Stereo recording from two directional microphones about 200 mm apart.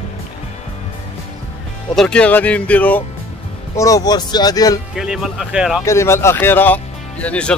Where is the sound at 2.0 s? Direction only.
5° left (ahead or behind).